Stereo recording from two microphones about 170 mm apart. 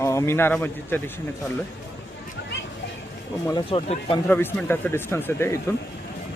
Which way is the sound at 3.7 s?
30° left (ahead or behind).